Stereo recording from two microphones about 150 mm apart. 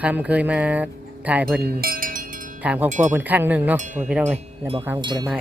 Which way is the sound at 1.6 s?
85° right.